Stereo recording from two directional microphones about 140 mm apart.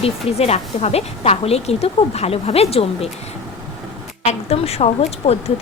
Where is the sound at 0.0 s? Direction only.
45° left (ahead or behind).